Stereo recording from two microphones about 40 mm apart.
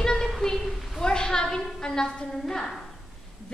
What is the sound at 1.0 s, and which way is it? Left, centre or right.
A woman's voice, centre.